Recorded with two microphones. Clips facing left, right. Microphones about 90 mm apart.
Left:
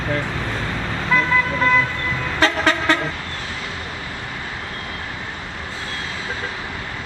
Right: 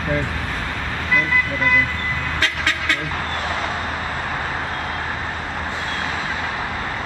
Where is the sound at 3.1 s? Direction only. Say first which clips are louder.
Right 6 dB; 50° right (ahead or behind).